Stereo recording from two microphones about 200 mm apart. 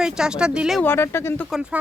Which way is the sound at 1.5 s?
5° right (ahead or behind).